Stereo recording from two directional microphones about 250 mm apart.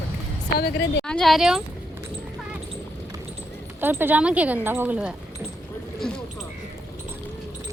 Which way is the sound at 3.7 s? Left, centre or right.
Centre.